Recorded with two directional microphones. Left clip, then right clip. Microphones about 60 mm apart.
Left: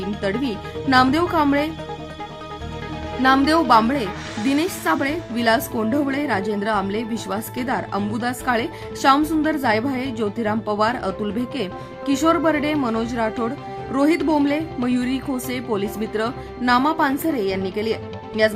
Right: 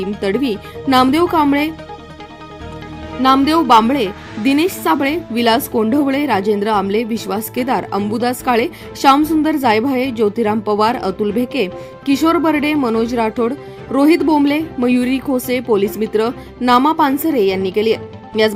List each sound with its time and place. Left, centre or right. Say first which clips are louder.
0.0 s a woman's voice: right 6 dB; right
3.2 s speech: right 4 dB; right
3.7 s a woman's voice: right 5 dB; right
5.9 s speech: right 5 dB; right
12.9 s a woman's voice: right 6 dB; right
15.4 s speech: right 11 dB; right